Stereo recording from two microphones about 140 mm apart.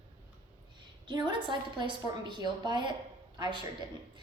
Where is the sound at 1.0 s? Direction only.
35° right (ahead or behind).